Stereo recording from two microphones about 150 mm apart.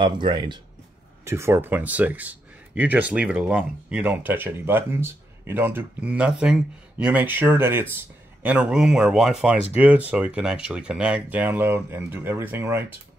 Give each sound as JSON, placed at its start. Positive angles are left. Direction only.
{"t": 0.0, "sound": "speech", "side_deg": -30}
{"t": 1.2, "sound": "speech", "side_deg": -15}